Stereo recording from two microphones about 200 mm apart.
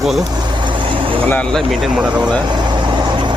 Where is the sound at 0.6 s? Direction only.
25° right (ahead or behind).